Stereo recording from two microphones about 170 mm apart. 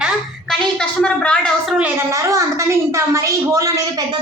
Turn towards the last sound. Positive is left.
turn(degrees=-15)  # may be behind; listen again after turning